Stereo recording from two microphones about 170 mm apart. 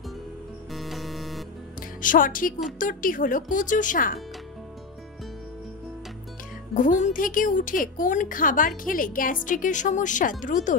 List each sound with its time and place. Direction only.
0.7 s music: centre (ahead or behind)
1.8 s a woman's voice: 55° left (ahead or behind)
6.7 s a woman's voice: 50° left (ahead or behind)